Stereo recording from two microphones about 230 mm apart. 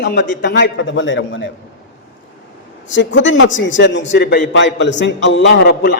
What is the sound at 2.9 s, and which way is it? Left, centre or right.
A man's voice, left.